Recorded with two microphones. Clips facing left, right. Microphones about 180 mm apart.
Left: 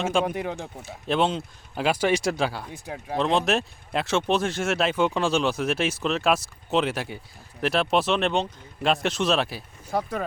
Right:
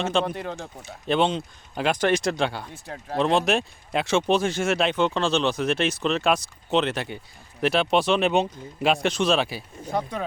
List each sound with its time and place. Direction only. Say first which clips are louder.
0.0 s speech: even; 10° left (ahead or behind)
0.9 s speech: right 1 dB; centre (ahead or behind)
3.2 s speech: right 1 dB; centre (ahead or behind)